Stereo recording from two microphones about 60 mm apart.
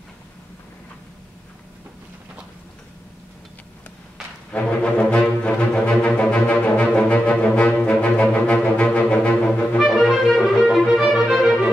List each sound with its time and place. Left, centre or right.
4.5 s music: left
9.8 s music: centre